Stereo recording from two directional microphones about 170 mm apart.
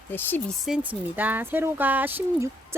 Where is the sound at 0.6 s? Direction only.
5° right (ahead or behind).